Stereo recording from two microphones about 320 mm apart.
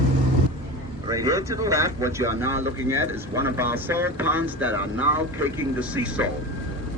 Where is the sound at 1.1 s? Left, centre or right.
Centre.